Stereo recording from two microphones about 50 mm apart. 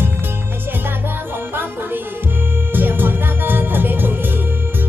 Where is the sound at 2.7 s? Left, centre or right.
Right.